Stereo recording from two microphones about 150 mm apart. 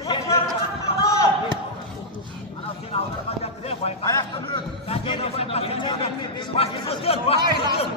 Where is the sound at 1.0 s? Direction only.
20° left (ahead or behind).